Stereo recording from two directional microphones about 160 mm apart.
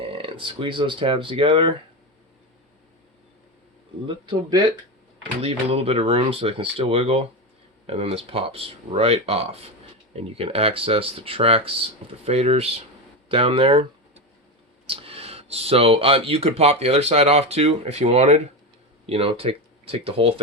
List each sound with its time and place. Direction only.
0.0 s speech: 35° right (ahead or behind)
4.0 s speech: 25° right (ahead or behind)
5.4 s speech: 40° right (ahead or behind)